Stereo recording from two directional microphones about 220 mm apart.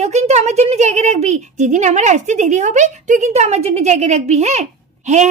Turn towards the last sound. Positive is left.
turn(degrees=-30)  # may be behind; listen again after turning